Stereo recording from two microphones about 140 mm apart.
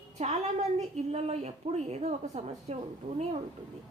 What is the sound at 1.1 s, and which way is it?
A woman's voice, 50° right (ahead or behind).